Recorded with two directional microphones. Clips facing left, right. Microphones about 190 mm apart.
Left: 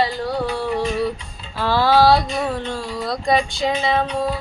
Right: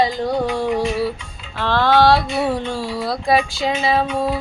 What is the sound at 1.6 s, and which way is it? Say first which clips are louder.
Speech: even; 5° left (ahead or behind).